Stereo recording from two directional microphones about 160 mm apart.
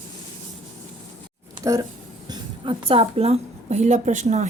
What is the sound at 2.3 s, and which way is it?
A woman's voice, 35° right (ahead or behind).